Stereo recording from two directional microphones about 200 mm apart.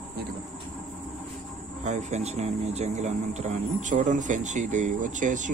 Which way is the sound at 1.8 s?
35° right (ahead or behind).